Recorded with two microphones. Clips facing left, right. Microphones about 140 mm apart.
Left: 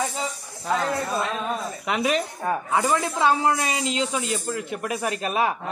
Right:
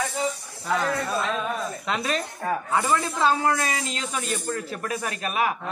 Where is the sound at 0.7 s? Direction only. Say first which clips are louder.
Left 1 dB; 20° left (ahead or behind).